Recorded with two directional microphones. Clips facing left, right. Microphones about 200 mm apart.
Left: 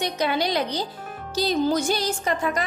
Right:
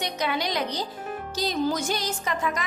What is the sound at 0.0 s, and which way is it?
Speech, 30° left (ahead or behind).